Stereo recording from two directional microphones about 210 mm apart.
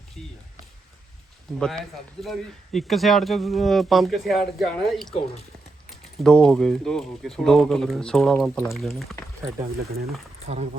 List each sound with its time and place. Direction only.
1.5 s speech: centre (ahead or behind)
9.8 s speech: 45° right (ahead or behind)
10.4 s speech: 30° right (ahead or behind)